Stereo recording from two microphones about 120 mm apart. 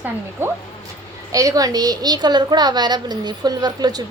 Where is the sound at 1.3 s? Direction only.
30° right (ahead or behind).